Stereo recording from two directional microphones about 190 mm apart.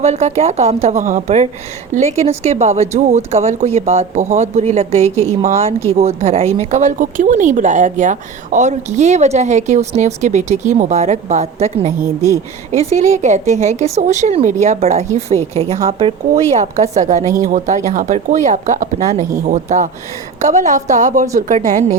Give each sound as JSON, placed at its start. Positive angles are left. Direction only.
{"t": 0.0, "sound": "speech", "side_deg": -35}